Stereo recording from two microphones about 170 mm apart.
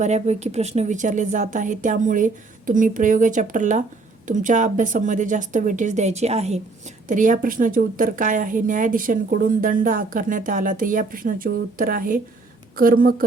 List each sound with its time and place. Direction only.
0.0 s a woman's voice: 40° right (ahead or behind); by 13.2 s 60° right (ahead or behind)